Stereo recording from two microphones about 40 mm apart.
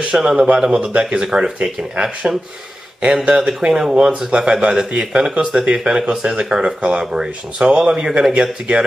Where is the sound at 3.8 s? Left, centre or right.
Centre.